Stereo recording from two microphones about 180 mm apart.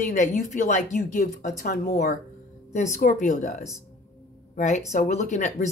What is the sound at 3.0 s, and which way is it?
Speech, 45° left (ahead or behind).